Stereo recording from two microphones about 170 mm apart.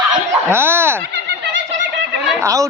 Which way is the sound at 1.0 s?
85° right.